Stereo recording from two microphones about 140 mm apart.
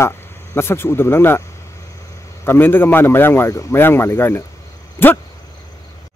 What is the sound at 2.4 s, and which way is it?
A man's voice, 15° left (ahead or behind).